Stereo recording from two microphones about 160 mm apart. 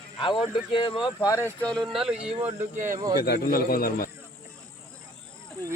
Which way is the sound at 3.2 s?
70° left (ahead or behind).